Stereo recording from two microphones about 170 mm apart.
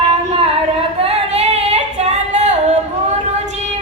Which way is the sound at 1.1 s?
40° right (ahead or behind).